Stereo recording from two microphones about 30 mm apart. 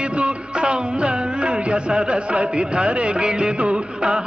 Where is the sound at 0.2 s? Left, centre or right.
Right.